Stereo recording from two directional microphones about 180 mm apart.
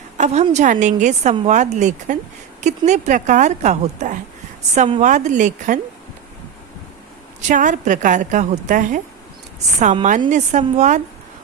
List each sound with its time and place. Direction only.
0.2 s a woman's voice: 40° right (ahead or behind)
7.4 s a woman's voice: 45° right (ahead or behind)